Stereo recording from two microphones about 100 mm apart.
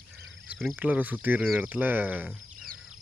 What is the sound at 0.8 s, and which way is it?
Speech, 15° right (ahead or behind).